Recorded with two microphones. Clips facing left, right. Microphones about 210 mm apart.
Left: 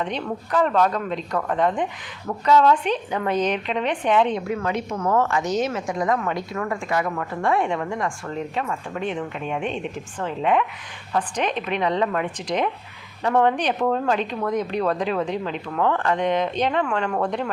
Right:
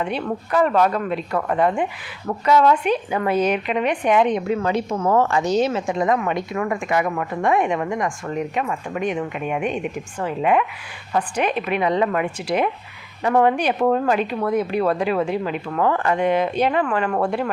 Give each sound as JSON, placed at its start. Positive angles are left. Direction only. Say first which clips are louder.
{"t": 0.0, "sound": "a woman's voice", "louder": "right 3 dB", "side_deg": -10}